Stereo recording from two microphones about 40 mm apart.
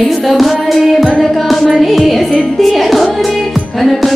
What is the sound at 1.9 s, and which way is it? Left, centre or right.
Music, centre.